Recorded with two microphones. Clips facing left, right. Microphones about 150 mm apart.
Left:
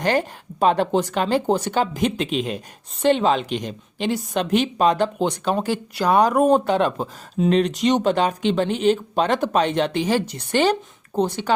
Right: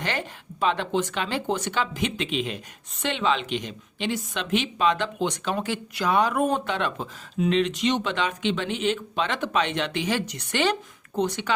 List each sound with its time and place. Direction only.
0.0 s speech: 40° left (ahead or behind)